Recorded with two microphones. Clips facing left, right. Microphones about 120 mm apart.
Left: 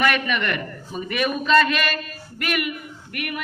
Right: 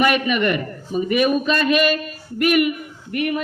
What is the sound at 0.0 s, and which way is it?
A man's voice, 20° right (ahead or behind).